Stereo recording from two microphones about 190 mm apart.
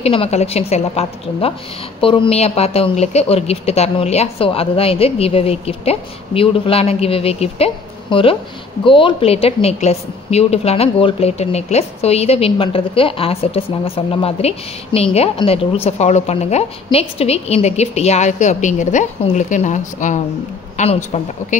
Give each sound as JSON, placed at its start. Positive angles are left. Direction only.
{"t": 0.0, "sound": "speech", "side_deg": 30}